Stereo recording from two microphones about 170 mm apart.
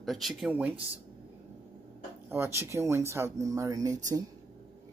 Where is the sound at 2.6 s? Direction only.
15° right (ahead or behind).